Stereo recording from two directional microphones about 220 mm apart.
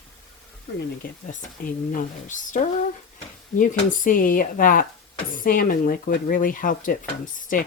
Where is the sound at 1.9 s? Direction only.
35° left (ahead or behind).